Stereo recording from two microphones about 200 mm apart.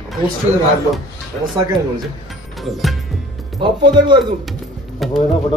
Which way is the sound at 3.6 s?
20° right (ahead or behind).